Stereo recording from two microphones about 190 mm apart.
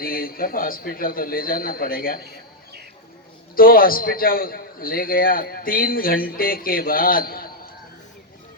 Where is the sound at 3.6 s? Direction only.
50° left (ahead or behind).